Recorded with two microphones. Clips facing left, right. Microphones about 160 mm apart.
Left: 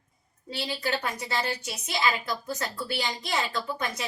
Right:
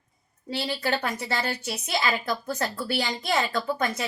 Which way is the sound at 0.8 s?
55° right (ahead or behind).